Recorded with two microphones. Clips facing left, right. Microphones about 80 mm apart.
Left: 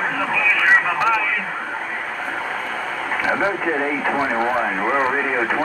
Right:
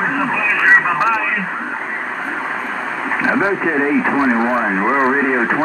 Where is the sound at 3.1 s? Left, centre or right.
Right.